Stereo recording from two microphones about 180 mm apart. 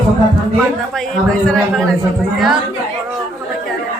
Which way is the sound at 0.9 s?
5° left (ahead or behind).